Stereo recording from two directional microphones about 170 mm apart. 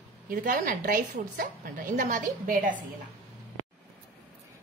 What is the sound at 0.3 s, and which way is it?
A woman's voice, 50° right (ahead or behind).